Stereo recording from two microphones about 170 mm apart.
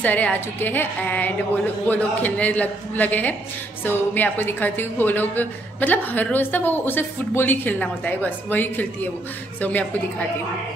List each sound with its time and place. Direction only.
0.0 s a woman's voice: 10° left (ahead or behind)